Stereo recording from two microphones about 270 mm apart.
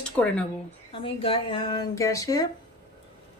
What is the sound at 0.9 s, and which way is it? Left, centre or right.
Speech, centre.